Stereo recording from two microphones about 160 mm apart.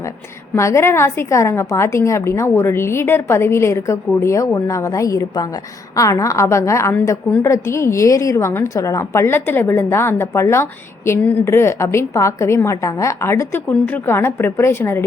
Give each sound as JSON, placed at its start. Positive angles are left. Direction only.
{"t": 0.5, "sound": "a woman's voice", "side_deg": 15}